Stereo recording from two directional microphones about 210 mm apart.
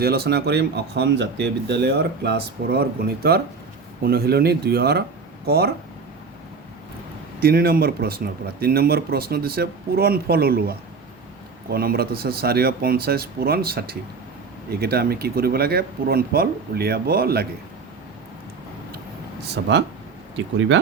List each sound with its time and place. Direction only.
0.0 s speech: 50° right (ahead or behind)
7.3 s speech: 45° right (ahead or behind)
19.4 s speech: 55° right (ahead or behind)